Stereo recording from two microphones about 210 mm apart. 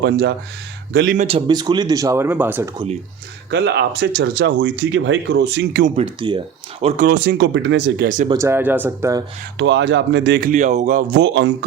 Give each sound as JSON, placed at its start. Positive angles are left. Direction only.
{"t": 0.0, "sound": "speech", "side_deg": -55}
{"t": 0.9, "sound": "speech", "side_deg": -40}
{"t": 1.3, "sound": "speech", "side_deg": -20}
{"t": 2.7, "sound": "speech", "side_deg": -30}
{"t": 3.5, "sound": "speech", "side_deg": -55}
{"t": 5.8, "sound": "speech", "side_deg": -25}
{"t": 8.3, "sound": "speech", "side_deg": -15}
{"t": 9.6, "sound": "speech", "side_deg": -55}
{"t": 10.5, "sound": "speech", "side_deg": -35}
{"t": 11.2, "sound": "speech", "side_deg": -55}